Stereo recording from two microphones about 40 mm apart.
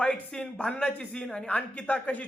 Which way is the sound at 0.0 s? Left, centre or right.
Left.